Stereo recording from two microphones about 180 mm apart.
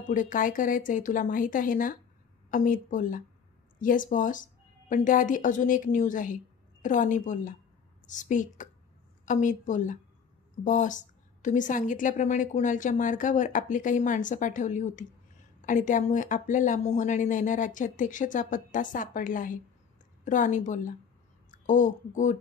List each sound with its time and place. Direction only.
0.1 s a woman's voice: 45° left (ahead or behind)